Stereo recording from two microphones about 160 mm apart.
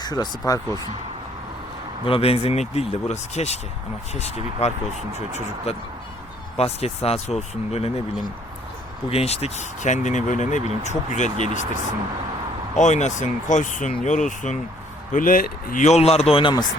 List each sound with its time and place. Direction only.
0.0 s speech: 25° left (ahead or behind)
2.0 s speech: 35° left (ahead or behind)
6.6 s speech: 40° left (ahead or behind)
9.0 s speech: 40° left (ahead or behind)
12.7 s speech: 50° left (ahead or behind); by 16.6 s 30° left (ahead or behind)